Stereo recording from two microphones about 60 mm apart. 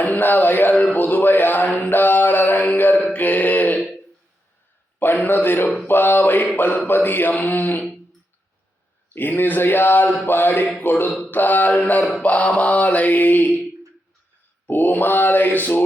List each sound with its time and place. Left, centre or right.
0.0 s speech: left
0.9 s a sound: left
1.9 s mantra: left
5.1 s a man's voice: left
9.1 s a man's voice: left
11.8 s mantra: left
14.7 s a man's voice: left